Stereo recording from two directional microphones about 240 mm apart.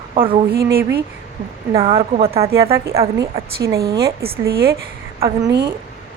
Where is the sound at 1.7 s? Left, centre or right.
Right.